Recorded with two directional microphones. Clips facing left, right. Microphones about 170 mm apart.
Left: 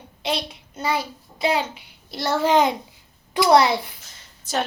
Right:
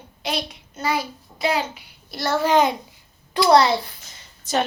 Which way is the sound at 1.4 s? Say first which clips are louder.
Left 1 dB; 25° left (ahead or behind).